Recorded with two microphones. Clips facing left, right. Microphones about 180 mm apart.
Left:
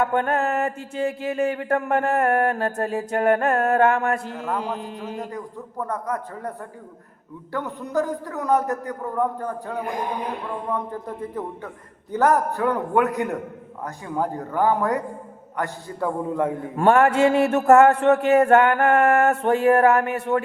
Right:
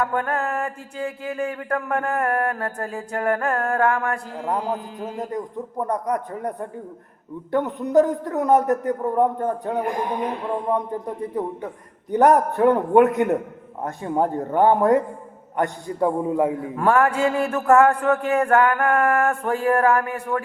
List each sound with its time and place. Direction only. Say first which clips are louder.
0.0 s music: left 2 dB; 25° left (ahead or behind)
4.4 s a man's voice: right 2 dB; 20° right (ahead or behind)
16.7 s music: left 3 dB; 25° left (ahead or behind)